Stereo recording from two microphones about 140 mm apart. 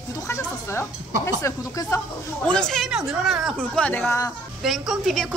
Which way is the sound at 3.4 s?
5° left (ahead or behind).